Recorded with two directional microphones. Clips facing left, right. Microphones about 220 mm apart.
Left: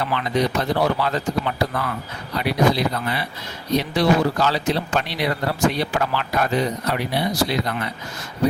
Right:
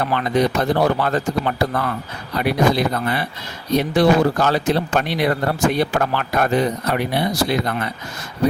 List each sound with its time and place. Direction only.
0.0 s speech: 50° right (ahead or behind)